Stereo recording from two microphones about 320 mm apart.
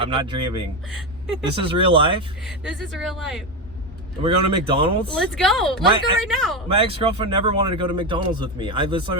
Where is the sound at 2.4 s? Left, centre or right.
Centre.